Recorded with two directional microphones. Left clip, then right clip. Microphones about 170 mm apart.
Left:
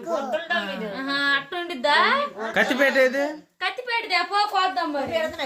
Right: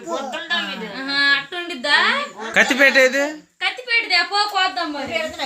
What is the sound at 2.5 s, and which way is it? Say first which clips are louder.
Speech: right 7 dB; 15° right (ahead or behind).